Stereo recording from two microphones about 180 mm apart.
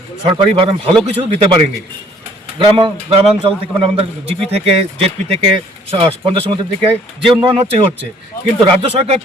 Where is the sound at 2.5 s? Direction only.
30° right (ahead or behind).